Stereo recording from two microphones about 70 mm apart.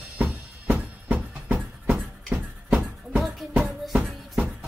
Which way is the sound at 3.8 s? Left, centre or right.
Centre.